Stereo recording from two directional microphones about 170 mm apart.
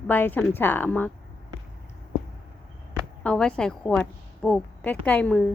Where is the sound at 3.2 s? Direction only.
5° left (ahead or behind).